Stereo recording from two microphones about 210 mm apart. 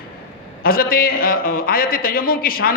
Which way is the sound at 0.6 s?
45° left (ahead or behind).